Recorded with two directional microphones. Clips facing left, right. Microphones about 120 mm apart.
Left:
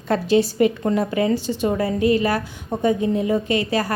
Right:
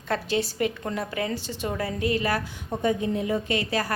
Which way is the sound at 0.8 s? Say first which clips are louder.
Left 9 dB; 25° left (ahead or behind).